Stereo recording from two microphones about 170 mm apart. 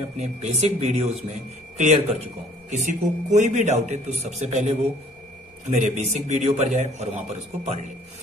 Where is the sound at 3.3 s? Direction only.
45° right (ahead or behind).